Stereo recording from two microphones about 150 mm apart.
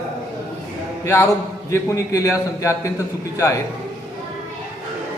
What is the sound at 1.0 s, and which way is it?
A man's voice, 20° left (ahead or behind).